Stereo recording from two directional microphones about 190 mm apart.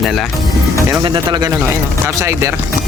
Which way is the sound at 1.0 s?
25° right (ahead or behind).